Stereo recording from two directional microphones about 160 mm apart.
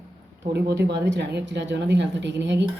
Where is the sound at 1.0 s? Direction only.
90° right.